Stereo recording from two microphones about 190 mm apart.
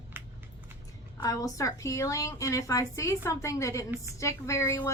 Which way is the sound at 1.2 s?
15° left (ahead or behind).